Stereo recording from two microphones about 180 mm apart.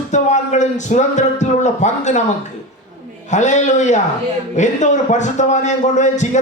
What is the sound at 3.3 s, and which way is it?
A man's voice, 40° left (ahead or behind).